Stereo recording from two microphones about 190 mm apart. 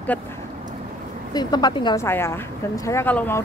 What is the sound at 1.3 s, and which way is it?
Speech, 20° left (ahead or behind).